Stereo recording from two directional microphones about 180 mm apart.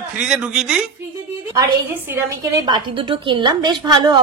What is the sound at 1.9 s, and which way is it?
A woman's voice, 20° right (ahead or behind).